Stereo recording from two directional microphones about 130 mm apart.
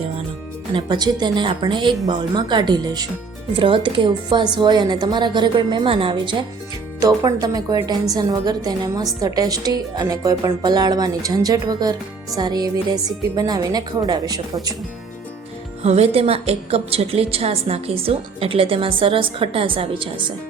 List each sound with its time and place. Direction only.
0.7 s a woman's voice: 35° right (ahead or behind)
7.2 s a woman's voice: 30° right (ahead or behind)
15.8 s a woman's voice: 55° right (ahead or behind)